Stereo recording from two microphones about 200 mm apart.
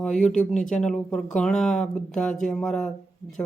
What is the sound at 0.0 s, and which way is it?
A woman's voice, 5° left (ahead or behind).